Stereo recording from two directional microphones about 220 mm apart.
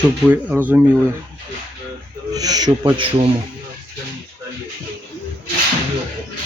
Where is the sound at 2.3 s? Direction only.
15° right (ahead or behind).